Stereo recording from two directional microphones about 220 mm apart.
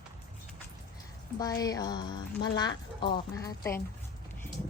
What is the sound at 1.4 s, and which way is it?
A woman's voice, 15° left (ahead or behind).